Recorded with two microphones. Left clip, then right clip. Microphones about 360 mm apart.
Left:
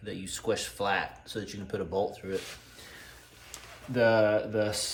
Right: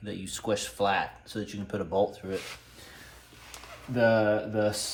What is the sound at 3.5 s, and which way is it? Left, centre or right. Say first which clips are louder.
Speech: left 1 dB; centre.